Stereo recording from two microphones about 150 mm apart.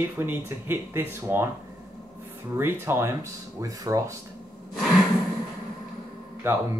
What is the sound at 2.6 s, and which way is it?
Speech, 15° right (ahead or behind).